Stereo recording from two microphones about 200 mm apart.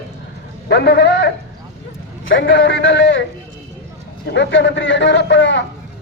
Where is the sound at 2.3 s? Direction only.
65° left (ahead or behind).